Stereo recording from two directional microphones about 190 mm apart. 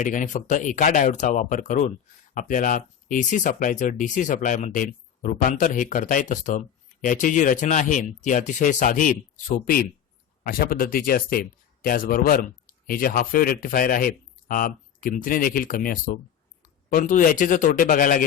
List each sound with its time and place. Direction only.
0.0 s speech: 40° left (ahead or behind)
10.4 s speech: 50° left (ahead or behind)